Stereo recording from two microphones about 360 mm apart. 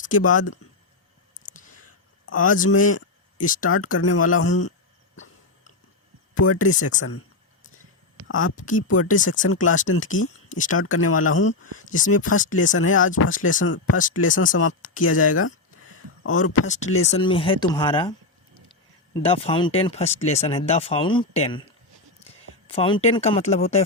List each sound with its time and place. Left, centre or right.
0.2 s speech: left
2.2 s a sound: left
2.5 s speech: left
3.7 s speech: left
6.3 s speech: left
8.3 s speech: left
9.1 s speech: left
9.4 s speech: left
11.4 s speech: left
12.0 s speech: left
16.6 s speech: centre
19.1 s speech: centre
22.6 s speech: centre